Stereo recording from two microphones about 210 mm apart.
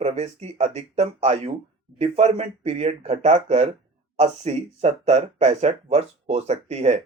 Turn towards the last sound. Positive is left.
turn(degrees=-30)  # may be behind; listen again after turning